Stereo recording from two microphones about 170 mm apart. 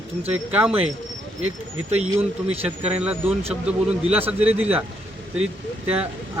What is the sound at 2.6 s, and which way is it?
Speech, 35° right (ahead or behind).